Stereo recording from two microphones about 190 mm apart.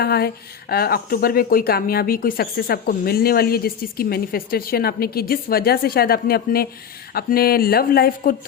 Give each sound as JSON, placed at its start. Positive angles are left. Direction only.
{"t": 0.0, "sound": "speech", "side_deg": 55}